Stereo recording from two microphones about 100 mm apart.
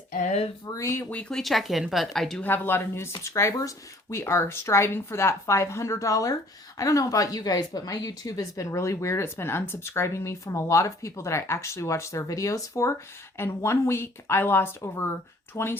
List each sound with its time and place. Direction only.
0.6 s speech: 35° left (ahead or behind)
1.1 s speech: 10° left (ahead or behind)
2.4 s speech: 20° left (ahead or behind)